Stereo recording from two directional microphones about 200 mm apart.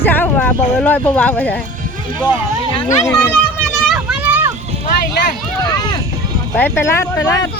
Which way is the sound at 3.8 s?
5° right (ahead or behind).